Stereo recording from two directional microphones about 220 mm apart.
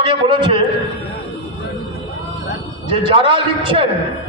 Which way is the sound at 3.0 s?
25° right (ahead or behind).